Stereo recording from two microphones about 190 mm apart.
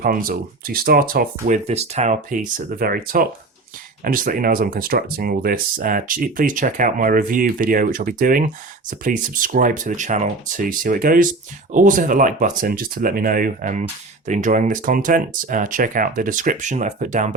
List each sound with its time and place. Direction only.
0.0 s speech: 50° right (ahead or behind)
1.5 s speech: 35° right (ahead or behind)